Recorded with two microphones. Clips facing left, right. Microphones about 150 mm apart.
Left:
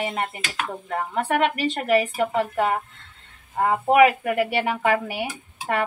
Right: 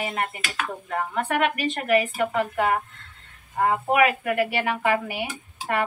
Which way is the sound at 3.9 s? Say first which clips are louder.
Left 6 dB; 25° left (ahead or behind).